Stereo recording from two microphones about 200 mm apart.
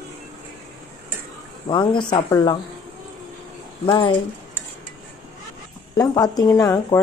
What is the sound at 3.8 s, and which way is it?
Speech, 20° left (ahead or behind).